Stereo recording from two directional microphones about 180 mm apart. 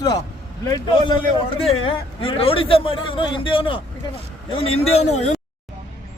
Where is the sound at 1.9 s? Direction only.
30° left (ahead or behind).